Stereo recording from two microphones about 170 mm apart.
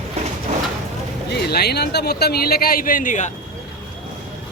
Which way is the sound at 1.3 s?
70° left (ahead or behind).